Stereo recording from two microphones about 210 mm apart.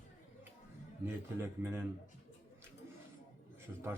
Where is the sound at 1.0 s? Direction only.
10° right (ahead or behind).